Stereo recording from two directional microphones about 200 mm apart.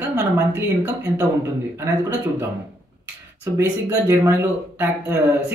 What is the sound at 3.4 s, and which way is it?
Speech, 15° right (ahead or behind).